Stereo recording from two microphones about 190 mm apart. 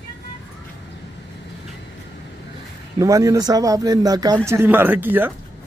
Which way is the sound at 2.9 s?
15° right (ahead or behind).